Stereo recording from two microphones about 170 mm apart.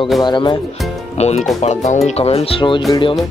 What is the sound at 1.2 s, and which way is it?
Speech, 40° left (ahead or behind).